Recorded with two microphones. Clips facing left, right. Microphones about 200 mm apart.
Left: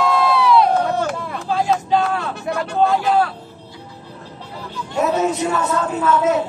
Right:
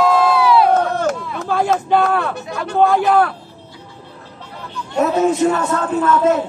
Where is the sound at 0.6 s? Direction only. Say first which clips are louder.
Right 3 dB; 45° right (ahead or behind).